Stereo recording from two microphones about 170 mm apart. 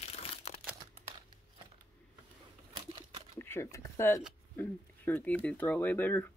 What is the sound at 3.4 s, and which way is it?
Speech, 15° left (ahead or behind).